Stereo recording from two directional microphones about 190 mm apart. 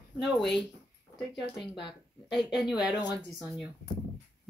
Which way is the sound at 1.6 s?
25° left (ahead or behind).